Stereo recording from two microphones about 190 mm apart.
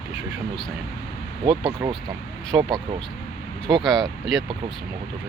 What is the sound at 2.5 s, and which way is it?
Speech, 10° right (ahead or behind).